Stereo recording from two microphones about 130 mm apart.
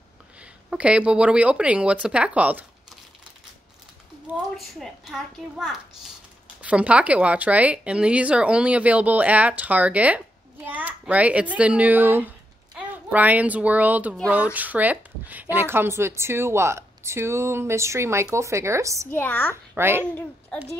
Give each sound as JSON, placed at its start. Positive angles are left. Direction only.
{"t": 0.4, "sound": "speech", "side_deg": -10}
{"t": 4.6, "sound": "a woman's voice", "side_deg": 0}
{"t": 19.0, "sound": "a woman's voice", "side_deg": 15}
{"t": 19.5, "sound": "speech", "side_deg": -15}
{"t": 20.5, "sound": "a woman's voice", "side_deg": 5}